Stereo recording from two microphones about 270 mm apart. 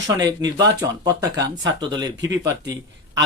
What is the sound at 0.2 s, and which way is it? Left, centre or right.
Speech, centre.